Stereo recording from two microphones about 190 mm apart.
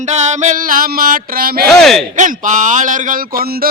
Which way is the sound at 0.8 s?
50° right (ahead or behind).